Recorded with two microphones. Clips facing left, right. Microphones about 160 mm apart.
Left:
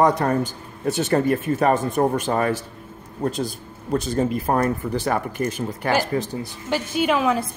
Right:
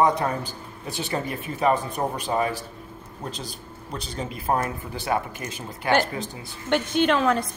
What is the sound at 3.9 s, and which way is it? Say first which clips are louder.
Speech: left 11 dB; 45° left (ahead or behind).